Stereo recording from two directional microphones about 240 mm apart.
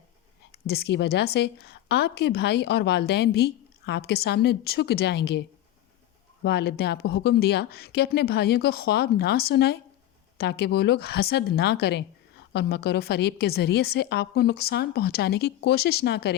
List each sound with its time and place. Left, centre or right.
0.5 s a woman's voice: left